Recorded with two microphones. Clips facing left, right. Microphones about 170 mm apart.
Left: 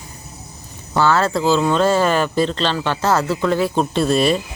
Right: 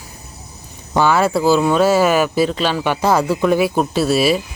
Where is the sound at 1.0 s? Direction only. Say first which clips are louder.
Right 2 dB; 10° right (ahead or behind).